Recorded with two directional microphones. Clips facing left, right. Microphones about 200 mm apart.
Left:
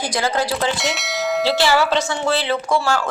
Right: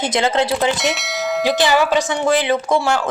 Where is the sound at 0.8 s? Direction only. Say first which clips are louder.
Right 2 dB; centre (ahead or behind).